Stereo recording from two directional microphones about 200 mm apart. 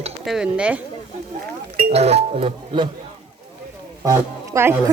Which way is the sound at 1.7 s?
30° right (ahead or behind).